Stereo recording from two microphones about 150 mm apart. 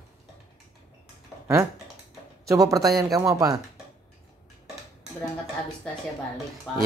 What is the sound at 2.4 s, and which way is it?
Speech, 20° right (ahead or behind).